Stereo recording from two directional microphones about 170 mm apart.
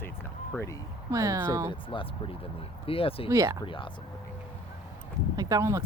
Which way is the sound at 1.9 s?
30° left (ahead or behind).